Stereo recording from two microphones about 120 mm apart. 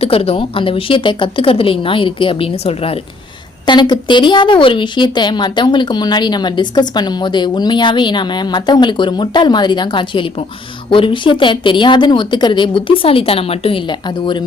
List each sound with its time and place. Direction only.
0.0 s a woman's voice: 55° left (ahead or behind)
3.7 s a woman's voice: 40° left (ahead or behind)